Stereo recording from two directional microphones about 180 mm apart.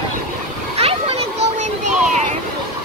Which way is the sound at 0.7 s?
35° right (ahead or behind).